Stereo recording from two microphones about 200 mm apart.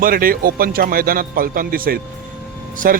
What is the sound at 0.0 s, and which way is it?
Speech, 45° right (ahead or behind).